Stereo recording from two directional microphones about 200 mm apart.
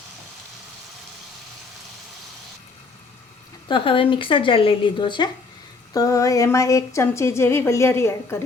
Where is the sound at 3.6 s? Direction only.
25° left (ahead or behind).